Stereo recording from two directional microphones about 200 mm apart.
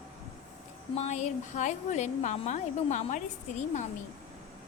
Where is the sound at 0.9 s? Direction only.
35° left (ahead or behind).